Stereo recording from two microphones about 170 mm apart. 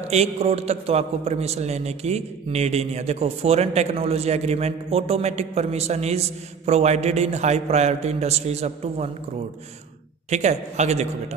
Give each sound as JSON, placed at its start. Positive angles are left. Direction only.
{"t": 0.1, "sound": "a man's voice", "side_deg": -35}
{"t": 10.3, "sound": "speech", "side_deg": -40}